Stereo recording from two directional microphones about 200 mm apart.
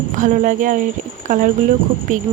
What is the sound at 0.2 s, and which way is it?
Speech, 40° right (ahead or behind).